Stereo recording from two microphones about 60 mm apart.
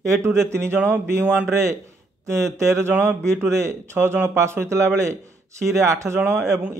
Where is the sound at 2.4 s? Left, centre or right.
Right.